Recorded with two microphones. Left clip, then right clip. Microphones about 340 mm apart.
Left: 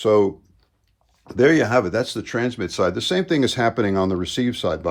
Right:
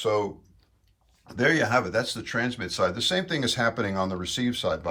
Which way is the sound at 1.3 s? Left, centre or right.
Left.